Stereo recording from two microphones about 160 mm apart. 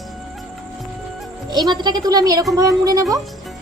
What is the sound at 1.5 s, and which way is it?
Speech, 25° right (ahead or behind).